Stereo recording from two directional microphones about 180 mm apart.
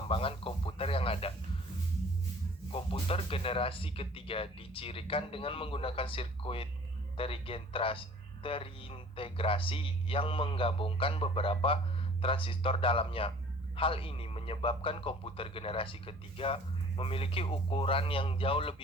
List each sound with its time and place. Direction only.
0.1 s speech: 30° left (ahead or behind)
2.7 s speech: 30° left (ahead or behind)